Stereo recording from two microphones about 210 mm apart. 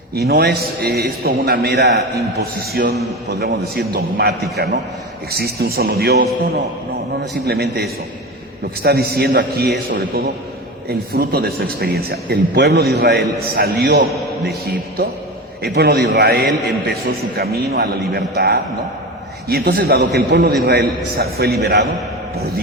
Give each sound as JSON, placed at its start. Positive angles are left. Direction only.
{"t": 0.1, "sound": "speech", "side_deg": -50}
{"t": 7.4, "sound": "speech", "side_deg": -50}
{"t": 10.8, "sound": "speech", "side_deg": -45}